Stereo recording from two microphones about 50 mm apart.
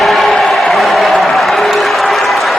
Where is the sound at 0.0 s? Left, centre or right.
Centre.